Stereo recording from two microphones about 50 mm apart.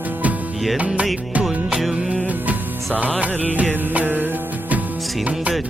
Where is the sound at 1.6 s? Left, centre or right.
Centre.